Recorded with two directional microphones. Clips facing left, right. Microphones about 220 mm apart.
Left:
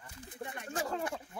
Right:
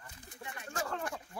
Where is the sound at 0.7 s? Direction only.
15° left (ahead or behind).